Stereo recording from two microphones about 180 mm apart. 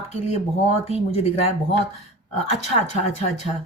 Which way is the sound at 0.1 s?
35° left (ahead or behind).